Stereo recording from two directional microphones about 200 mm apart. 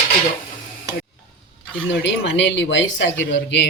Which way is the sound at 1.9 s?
60° left (ahead or behind).